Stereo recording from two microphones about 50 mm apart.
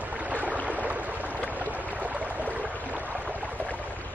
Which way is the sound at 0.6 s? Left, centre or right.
Right.